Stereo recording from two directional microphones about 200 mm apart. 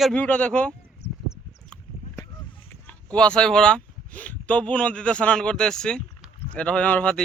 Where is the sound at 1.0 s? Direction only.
30° left (ahead or behind).